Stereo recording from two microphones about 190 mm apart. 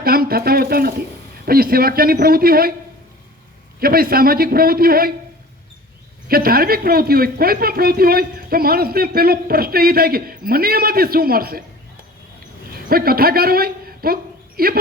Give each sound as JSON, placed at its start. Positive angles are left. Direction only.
{"t": 0.0, "sound": "speech", "side_deg": -55}
{"t": 3.8, "sound": "speech", "side_deg": -50}
{"t": 6.2, "sound": "speech", "side_deg": -50}
{"t": 12.7, "sound": "a man's voice", "side_deg": -50}